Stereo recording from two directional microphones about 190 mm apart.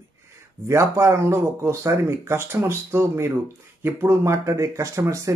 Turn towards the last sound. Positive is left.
turn(degrees=-15)  # may be behind; listen again after turning